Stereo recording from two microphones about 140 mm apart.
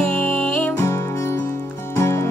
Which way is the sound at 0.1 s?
10° left (ahead or behind).